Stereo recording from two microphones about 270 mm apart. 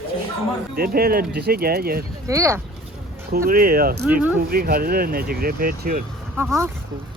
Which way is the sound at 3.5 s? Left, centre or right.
Right.